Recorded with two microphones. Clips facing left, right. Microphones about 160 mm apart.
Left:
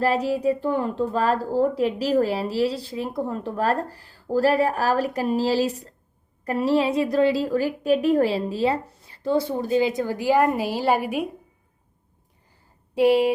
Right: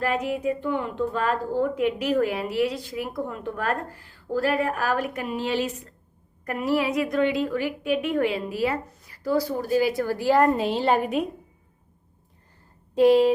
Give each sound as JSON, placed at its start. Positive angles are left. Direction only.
{"t": 0.0, "sound": "a woman's voice", "side_deg": 35}
{"t": 12.9, "sound": "speech", "side_deg": 10}